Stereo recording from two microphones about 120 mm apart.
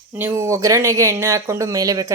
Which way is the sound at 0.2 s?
20° right (ahead or behind).